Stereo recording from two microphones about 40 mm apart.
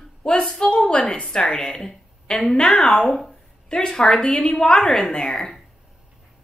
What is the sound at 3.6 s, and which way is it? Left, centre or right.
A woman's voice, left.